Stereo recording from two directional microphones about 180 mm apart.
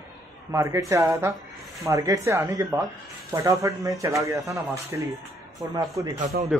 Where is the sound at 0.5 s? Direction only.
15° right (ahead or behind).